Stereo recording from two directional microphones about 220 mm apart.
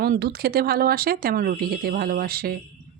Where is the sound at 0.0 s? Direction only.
45° right (ahead or behind).